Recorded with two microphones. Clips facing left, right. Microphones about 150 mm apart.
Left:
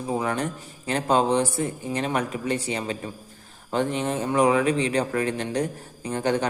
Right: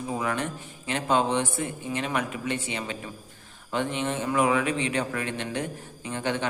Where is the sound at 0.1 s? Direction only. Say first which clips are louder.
Left 4 dB; 35° left (ahead or behind).